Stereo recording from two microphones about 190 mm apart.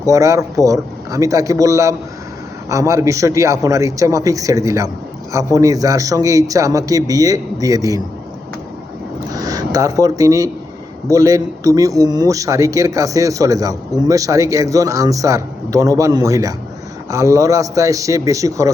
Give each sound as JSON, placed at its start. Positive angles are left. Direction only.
{"t": 0.0, "sound": "speech", "side_deg": -15}
{"t": 9.3, "sound": "speech", "side_deg": -20}